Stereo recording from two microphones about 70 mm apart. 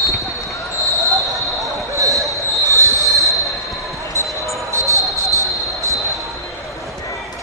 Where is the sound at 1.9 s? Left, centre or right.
Right.